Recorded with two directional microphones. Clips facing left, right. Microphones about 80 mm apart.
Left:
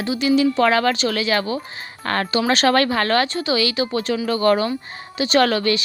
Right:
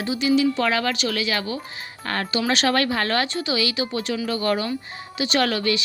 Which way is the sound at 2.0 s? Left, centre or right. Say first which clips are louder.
Left 4 dB; left.